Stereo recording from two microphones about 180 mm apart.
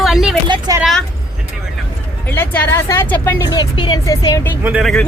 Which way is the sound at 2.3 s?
15° left (ahead or behind).